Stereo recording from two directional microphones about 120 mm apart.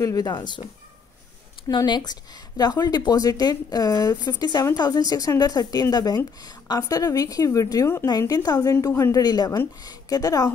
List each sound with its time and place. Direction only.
0.0 s speech: 30° left (ahead or behind)
1.9 s speech: 35° left (ahead or behind)